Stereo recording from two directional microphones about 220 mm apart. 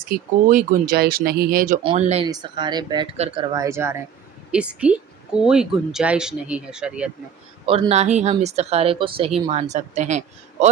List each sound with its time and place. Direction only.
0.0 s speech: 40° right (ahead or behind)
1.8 s speech: 25° right (ahead or behind); by 7.1 s 5° right (ahead or behind)
7.6 s speech: 25° right (ahead or behind)